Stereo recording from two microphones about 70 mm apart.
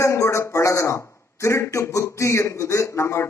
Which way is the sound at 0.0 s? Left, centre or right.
Left.